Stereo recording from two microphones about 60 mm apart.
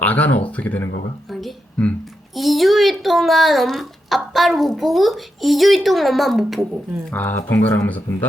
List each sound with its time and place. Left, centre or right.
0.0 s speech: left
1.3 s a sound: centre
3.0 s a child's voice: centre
7.1 s speech: left
7.6 s speech: left